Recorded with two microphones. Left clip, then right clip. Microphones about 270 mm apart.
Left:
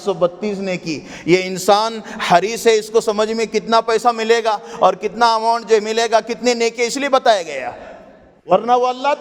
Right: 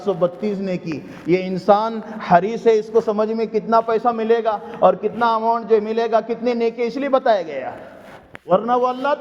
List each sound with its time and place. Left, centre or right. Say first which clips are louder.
0.0 s a man's voice: left 2 dB; left